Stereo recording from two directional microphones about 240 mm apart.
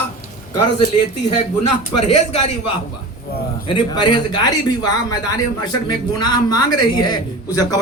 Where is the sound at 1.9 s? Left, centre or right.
Left.